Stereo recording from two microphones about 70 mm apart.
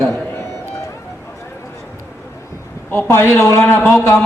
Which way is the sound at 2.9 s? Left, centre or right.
Left.